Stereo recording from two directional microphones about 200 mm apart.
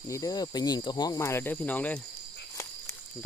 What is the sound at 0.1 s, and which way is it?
Speech, 20° left (ahead or behind).